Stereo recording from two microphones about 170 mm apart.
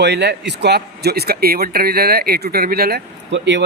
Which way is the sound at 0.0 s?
80° right.